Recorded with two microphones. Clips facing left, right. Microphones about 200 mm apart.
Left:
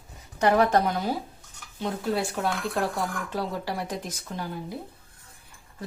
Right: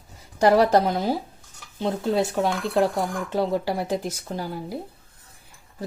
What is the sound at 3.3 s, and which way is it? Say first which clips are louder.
Speech: right 7 dB; 25° right (ahead or behind).